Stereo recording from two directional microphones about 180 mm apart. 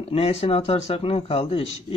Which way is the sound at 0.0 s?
35° left (ahead or behind).